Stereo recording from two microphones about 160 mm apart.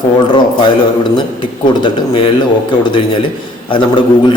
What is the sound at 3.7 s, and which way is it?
Speech, 30° left (ahead or behind).